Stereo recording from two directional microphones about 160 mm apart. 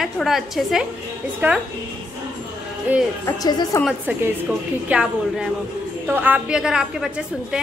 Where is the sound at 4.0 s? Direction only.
10° right (ahead or behind).